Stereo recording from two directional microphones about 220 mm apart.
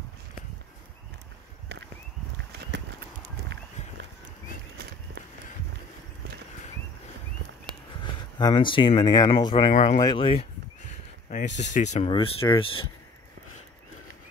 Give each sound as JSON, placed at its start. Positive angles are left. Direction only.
{"t": 2.7, "sound": "horse", "side_deg": -50}
{"t": 8.0, "sound": "speech", "side_deg": 20}
{"t": 11.5, "sound": "speech", "side_deg": 30}